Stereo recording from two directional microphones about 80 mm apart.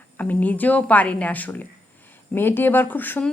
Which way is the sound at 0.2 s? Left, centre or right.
Centre.